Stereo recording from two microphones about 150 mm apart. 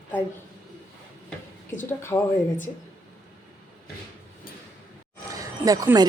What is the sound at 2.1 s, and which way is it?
Speech, 20° left (ahead or behind).